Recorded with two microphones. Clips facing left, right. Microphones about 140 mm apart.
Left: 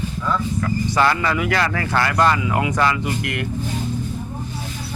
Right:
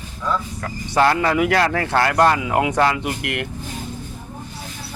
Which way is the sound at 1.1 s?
60° right (ahead or behind).